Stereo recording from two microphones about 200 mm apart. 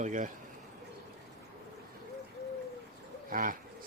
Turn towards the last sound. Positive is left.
turn(degrees=-45)  # may be behind; listen again after turning